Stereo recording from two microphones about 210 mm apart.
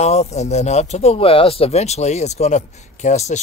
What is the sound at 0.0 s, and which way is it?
Speech, 30° left (ahead or behind).